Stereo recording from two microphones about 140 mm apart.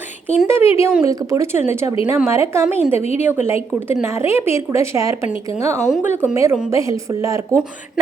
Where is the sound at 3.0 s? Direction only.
50° left (ahead or behind).